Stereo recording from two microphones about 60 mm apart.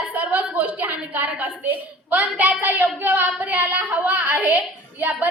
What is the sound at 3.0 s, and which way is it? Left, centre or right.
Child singing, right.